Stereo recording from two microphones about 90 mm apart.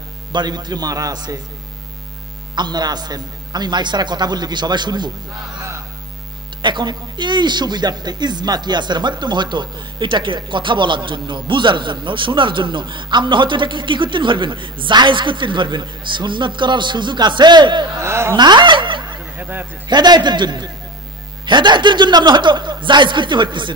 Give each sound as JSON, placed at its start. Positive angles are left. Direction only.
{"t": 0.3, "sound": "a man's voice", "side_deg": -55}
{"t": 2.5, "sound": "a man's voice", "side_deg": -55}
{"t": 6.6, "sound": "speech", "side_deg": -55}
{"t": 17.9, "sound": "a sound", "side_deg": -30}
{"t": 18.3, "sound": "snicker", "side_deg": -55}
{"t": 19.3, "sound": "a man's voice", "side_deg": -20}
{"t": 19.9, "sound": "a man's voice", "side_deg": -50}